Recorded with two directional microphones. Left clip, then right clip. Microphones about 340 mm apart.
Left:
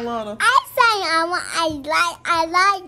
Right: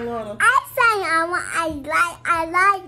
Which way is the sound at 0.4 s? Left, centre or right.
Centre.